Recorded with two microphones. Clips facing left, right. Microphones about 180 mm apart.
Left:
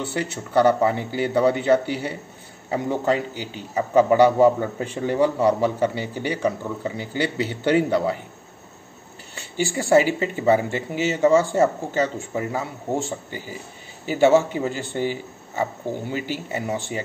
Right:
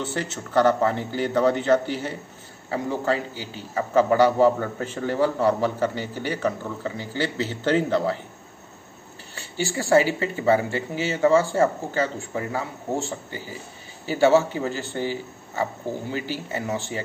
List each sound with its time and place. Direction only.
0.0 s a man's voice: 10° left (ahead or behind)
9.6 s a man's voice: 15° left (ahead or behind)